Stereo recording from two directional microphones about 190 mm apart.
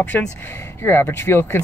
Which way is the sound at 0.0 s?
10° left (ahead or behind).